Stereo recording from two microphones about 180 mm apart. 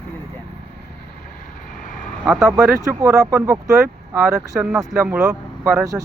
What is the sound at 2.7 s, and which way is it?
Speech, 15° right (ahead or behind).